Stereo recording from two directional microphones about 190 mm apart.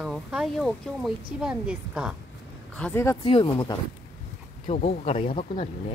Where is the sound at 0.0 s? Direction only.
Centre (ahead or behind).